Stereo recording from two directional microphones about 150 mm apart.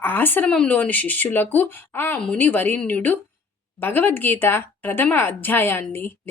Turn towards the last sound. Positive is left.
turn(degrees=15)  # may be behind; listen again after turning